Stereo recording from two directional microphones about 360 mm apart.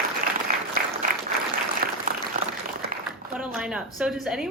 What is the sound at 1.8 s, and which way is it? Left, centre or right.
Applause, right.